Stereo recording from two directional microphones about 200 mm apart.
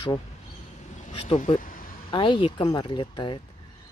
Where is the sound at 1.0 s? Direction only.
30° left (ahead or behind); by 2.0 s 45° left (ahead or behind).